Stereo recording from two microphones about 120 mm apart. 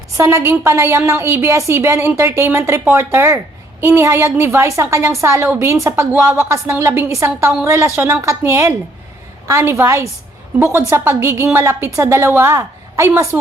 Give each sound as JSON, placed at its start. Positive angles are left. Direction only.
{"t": 0.2, "sound": "a woman's voice", "side_deg": -25}